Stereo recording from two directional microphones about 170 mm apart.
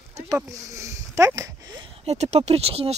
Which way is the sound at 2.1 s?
40° right (ahead or behind).